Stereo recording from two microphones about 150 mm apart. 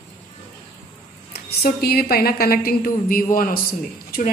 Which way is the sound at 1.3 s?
90° left.